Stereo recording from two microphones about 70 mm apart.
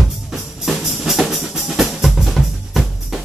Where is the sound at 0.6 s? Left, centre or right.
Centre.